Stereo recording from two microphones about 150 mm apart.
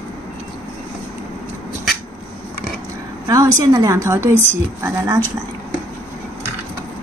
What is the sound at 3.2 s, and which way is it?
A woman's voice, 25° right (ahead or behind).